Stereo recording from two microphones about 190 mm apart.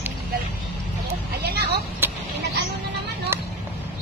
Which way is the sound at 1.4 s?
60° right (ahead or behind).